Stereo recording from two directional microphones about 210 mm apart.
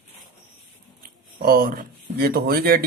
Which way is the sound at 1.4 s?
45° right (ahead or behind).